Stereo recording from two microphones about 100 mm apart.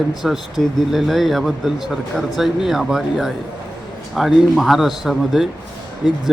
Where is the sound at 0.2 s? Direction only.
Centre (ahead or behind).